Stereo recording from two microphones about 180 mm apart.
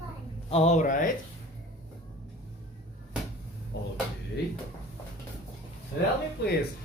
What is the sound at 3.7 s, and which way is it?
Drawer open or close, 80° left.